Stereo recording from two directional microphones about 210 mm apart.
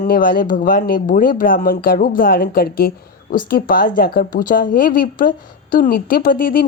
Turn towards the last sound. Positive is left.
turn(degrees=45)  # may be behind; listen again after turning